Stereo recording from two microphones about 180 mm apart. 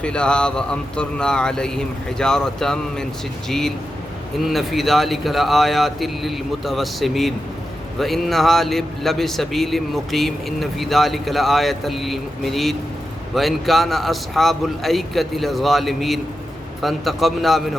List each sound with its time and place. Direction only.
0.0 s a man's voice: 5° left (ahead or behind)
4.4 s a man's voice: centre (ahead or behind)